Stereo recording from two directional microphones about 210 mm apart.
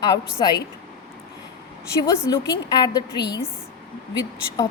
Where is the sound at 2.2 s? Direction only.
20° left (ahead or behind).